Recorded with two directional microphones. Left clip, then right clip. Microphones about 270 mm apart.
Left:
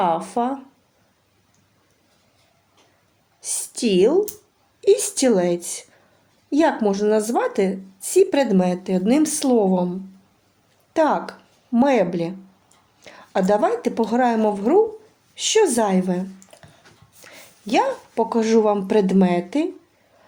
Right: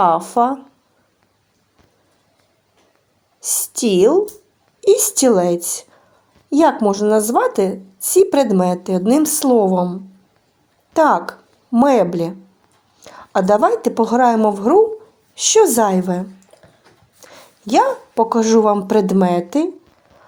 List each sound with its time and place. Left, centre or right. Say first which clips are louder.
0.0 s speech: right 7 dB; centre
3.4 s a woman's voice: right 5 dB; centre